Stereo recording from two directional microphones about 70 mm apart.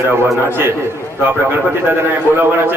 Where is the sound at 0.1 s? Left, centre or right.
Right.